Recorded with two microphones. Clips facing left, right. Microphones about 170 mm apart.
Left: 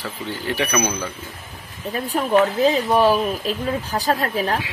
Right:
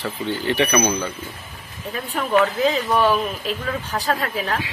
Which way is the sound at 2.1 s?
35° left (ahead or behind).